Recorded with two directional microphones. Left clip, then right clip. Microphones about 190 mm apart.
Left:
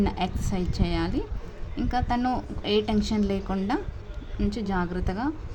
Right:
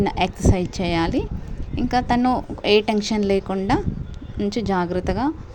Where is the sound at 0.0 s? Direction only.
30° right (ahead or behind).